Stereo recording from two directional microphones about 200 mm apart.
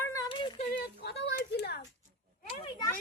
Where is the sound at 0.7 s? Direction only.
55° left (ahead or behind).